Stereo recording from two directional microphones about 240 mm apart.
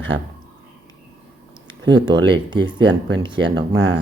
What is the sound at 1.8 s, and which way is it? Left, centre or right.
Speech, centre.